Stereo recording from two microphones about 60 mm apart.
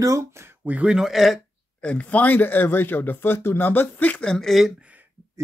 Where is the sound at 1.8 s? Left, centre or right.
Left.